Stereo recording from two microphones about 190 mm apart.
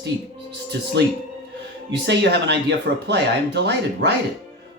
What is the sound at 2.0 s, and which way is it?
Speech, 65° right (ahead or behind).